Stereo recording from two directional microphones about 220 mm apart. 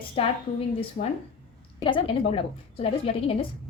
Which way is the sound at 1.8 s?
25° left (ahead or behind).